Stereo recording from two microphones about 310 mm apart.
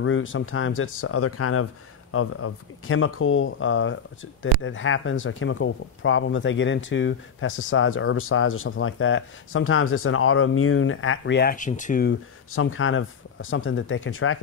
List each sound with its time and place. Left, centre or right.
0.0 s speech: left
12.5 s speech: left